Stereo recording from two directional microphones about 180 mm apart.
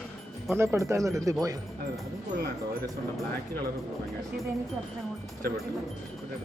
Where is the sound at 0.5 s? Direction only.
15° right (ahead or behind).